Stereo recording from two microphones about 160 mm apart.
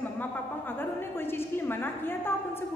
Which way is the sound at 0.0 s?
10° left (ahead or behind).